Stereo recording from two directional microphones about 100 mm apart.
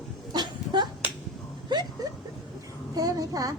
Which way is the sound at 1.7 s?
45° right (ahead or behind).